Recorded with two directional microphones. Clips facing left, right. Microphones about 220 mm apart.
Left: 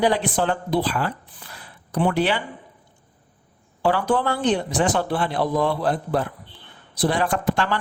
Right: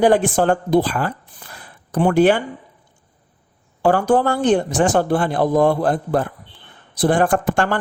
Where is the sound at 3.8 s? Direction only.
45° right (ahead or behind).